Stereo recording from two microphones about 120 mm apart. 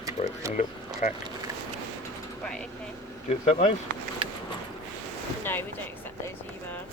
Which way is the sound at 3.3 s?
60° left (ahead or behind).